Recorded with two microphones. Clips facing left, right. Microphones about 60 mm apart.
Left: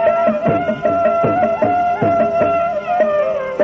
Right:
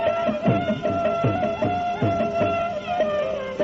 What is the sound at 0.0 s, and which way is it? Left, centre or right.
Music, left.